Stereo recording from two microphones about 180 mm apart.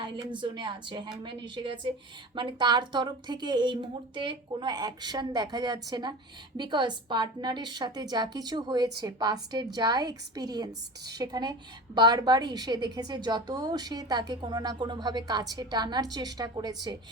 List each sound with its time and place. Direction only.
0.0 s a woman's voice: 25° right (ahead or behind)